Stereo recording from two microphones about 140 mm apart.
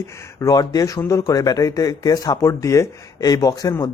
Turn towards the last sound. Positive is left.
turn(degrees=25)  # may be behind; listen again after turning